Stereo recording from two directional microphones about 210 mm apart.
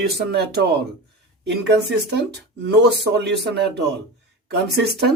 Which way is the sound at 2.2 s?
50° right (ahead or behind).